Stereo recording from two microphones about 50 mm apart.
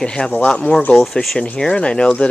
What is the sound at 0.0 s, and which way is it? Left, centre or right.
Speech, centre.